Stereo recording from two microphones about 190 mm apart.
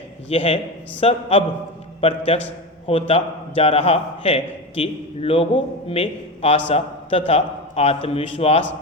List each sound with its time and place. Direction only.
0.3 s a man's voice: 30° left (ahead or behind)